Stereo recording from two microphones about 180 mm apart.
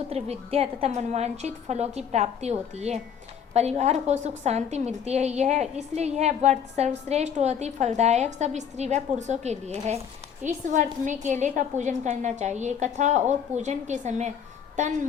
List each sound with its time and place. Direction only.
0.1 s a woman's voice: 35° right (ahead or behind)